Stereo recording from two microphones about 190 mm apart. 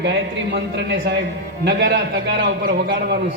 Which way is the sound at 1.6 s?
65° right (ahead or behind).